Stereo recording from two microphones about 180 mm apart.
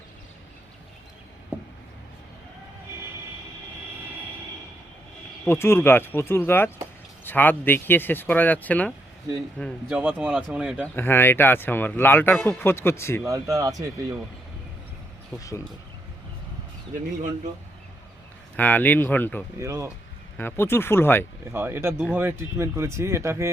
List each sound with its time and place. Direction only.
5.5 s speech: 15° left (ahead or behind)
9.9 s speech: 5° right (ahead or behind)
10.9 s speech: 10° left (ahead or behind)
13.2 s speech: 20° right (ahead or behind)
15.4 s speech: 20° left (ahead or behind)
18.5 s speech: 10° left (ahead or behind)
19.5 s speech: 15° right (ahead or behind)
20.3 s speech: 10° left (ahead or behind)
21.5 s speech: 15° right (ahead or behind)